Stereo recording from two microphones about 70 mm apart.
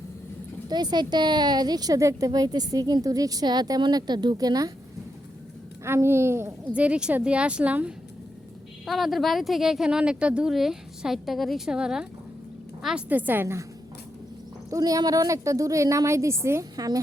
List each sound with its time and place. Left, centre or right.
0.7 s a woman's voice: right
2.0 s a woman's voice: right
5.8 s a woman's voice: right
6.7 s speech: centre
8.9 s speech: centre
13.1 s a woman's voice: right
14.7 s a woman's voice: right
16.7 s speech: right